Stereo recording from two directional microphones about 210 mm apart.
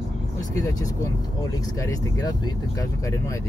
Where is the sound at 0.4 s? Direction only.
15° left (ahead or behind).